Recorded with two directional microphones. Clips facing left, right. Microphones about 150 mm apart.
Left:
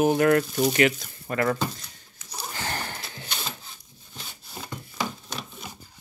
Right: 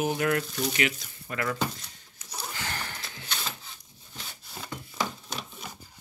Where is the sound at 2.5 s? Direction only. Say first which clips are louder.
Left 7 dB; 40° left (ahead or behind).